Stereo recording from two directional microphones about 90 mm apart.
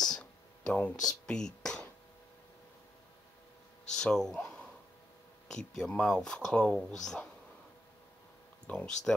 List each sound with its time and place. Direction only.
0.7 s speech: 20° left (ahead or behind)
1.0 s speech: 10° left (ahead or behind)
3.9 s speech: 5° left (ahead or behind)
4.4 s a sound: 15° left (ahead or behind)
5.5 s speech: 10° left (ahead or behind)
8.6 s speech: 10° left (ahead or behind)